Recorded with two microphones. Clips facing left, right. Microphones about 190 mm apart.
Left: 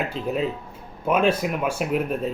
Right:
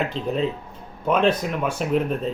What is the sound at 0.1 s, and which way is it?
Speech, 5° left (ahead or behind).